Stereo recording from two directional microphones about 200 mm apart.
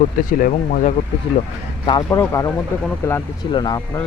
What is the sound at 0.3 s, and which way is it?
Speech, 45° left (ahead or behind).